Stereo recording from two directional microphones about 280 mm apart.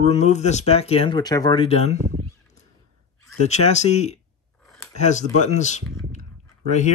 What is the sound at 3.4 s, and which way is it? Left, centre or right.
Speech, left.